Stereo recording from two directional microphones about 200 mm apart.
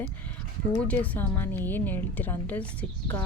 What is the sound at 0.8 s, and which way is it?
A woman's voice, 10° left (ahead or behind).